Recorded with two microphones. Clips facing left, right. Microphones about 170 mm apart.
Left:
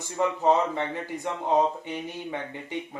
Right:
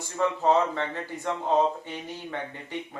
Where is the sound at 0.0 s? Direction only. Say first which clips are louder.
Left 1 dB; 20° left (ahead or behind).